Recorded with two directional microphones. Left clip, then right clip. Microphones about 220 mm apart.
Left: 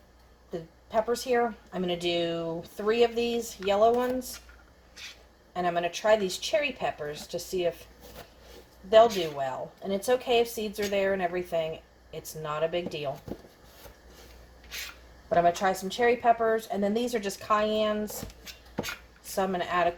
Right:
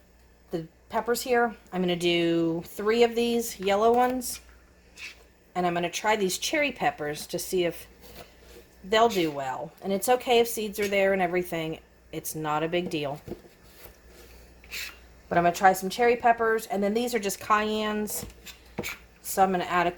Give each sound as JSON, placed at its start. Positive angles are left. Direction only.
{"t": 0.5, "sound": "speech", "side_deg": -50}
{"t": 5.5, "sound": "speech", "side_deg": -50}
{"t": 9.4, "sound": "speech", "side_deg": -50}
{"t": 15.3, "sound": "speech", "side_deg": -50}
{"t": 19.3, "sound": "speech", "side_deg": -50}